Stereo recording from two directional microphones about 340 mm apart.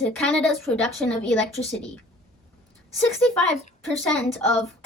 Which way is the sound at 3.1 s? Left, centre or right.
Centre.